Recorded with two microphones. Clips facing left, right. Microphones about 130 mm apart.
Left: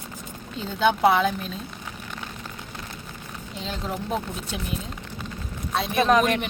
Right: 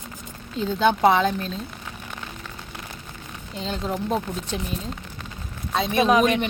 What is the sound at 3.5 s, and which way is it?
Speech, centre (ahead or behind).